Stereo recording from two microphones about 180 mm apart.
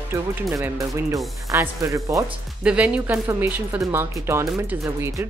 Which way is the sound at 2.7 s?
5° right (ahead or behind).